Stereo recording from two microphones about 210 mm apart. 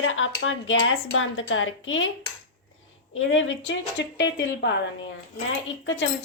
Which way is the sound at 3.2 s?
65° left (ahead or behind).